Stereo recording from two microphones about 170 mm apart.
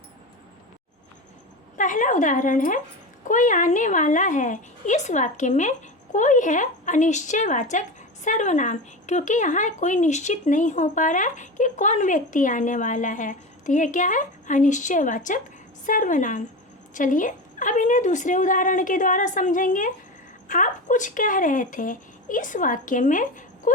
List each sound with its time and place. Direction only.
1.8 s a woman's voice: 50° left (ahead or behind)